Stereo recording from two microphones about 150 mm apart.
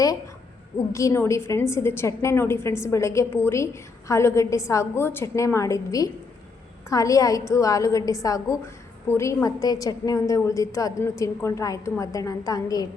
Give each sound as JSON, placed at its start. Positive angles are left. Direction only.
{"t": 0.9, "sound": "a woman's voice", "side_deg": 20}